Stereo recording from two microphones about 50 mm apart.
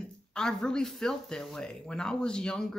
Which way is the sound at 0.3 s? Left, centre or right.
Centre.